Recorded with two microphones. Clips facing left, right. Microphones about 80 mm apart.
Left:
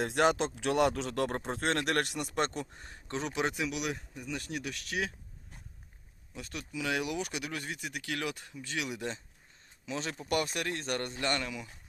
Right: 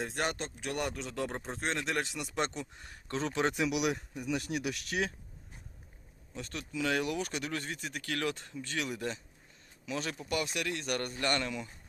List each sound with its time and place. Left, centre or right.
0.0 s speech: left
2.8 s a sound: left
3.2 s speech: centre
3.5 s speech: centre
6.3 s speech: centre
9.8 s a man's voice: left
10.2 s speech: left
11.4 s speech: centre